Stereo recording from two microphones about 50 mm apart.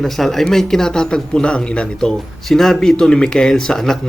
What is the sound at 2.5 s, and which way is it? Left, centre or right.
Speech, centre.